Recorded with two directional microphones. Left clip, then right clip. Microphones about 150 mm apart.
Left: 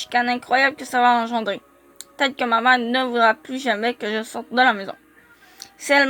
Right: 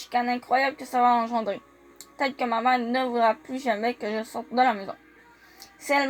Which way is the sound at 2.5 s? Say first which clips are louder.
Left 7 dB; 55° left (ahead or behind).